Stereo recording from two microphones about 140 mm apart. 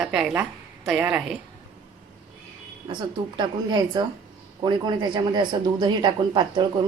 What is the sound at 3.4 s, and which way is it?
Speech, 30° right (ahead or behind).